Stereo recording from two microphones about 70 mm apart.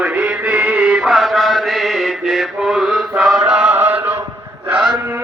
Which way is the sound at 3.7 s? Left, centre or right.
Right.